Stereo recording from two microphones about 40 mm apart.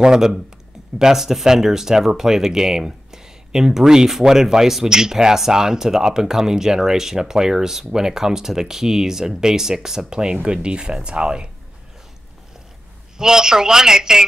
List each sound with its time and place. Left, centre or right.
0.0 s speech: centre
13.2 s speech: centre